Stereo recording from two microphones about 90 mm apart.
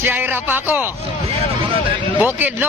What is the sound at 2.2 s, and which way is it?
Speech, 20° right (ahead or behind).